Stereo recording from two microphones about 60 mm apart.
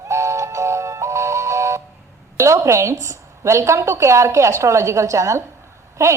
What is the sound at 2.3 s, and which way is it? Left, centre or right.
A woman's voice, right.